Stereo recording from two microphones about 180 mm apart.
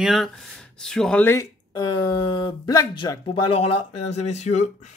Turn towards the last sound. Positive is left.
turn(degrees=40)  # may be behind; listen again after turning